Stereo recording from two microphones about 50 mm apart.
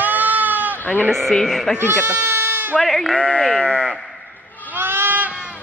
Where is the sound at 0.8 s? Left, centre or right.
Left.